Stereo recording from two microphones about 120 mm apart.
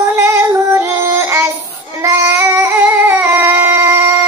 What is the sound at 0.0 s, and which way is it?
Female singing, 20° right (ahead or behind).